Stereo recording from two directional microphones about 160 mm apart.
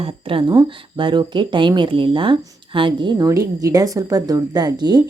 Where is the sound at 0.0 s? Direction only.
35° right (ahead or behind).